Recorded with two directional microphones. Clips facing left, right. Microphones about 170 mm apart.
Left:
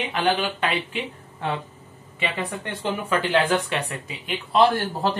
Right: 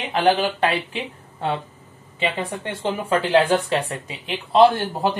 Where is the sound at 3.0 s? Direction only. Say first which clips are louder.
Right 4 dB; 30° right (ahead or behind).